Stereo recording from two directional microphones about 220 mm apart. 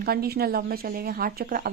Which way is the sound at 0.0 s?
45° right (ahead or behind).